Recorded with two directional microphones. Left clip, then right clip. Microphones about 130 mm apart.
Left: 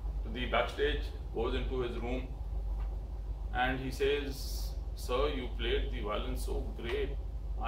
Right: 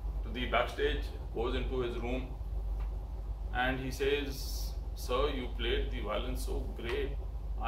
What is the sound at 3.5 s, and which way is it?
Speech, 20° left (ahead or behind).